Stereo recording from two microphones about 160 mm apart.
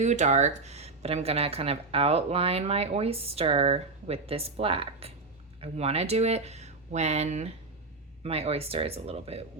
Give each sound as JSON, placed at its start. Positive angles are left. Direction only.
{"t": 0.0, "sound": "speech", "side_deg": -45}